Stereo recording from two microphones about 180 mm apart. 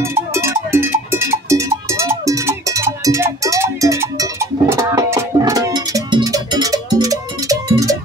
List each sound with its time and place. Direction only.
0.0 s cowbell: 15° right (ahead or behind)